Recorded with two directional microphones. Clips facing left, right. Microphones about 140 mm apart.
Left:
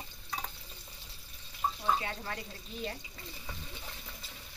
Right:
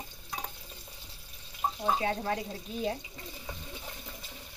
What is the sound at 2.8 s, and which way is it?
Water, 15° right (ahead or behind).